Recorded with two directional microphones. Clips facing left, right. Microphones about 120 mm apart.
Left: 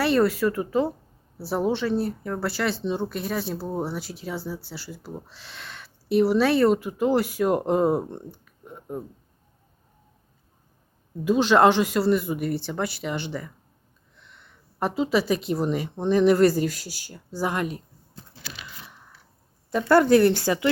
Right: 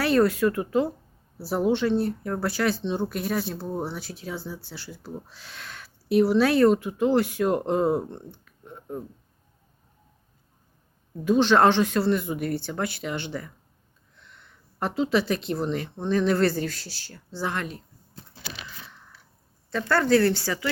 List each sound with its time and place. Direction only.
0.0 s speech: centre (ahead or behind)
8.4 s a sound: 5° left (ahead or behind)
11.3 s speech: 5° left (ahead or behind)
19.7 s speech: 15° left (ahead or behind)